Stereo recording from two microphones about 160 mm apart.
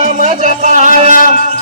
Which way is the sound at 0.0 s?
50° right (ahead or behind).